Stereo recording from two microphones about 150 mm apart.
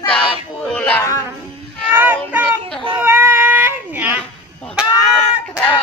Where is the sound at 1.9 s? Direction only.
10° right (ahead or behind).